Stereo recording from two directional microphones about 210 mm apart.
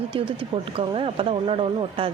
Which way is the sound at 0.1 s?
25° right (ahead or behind).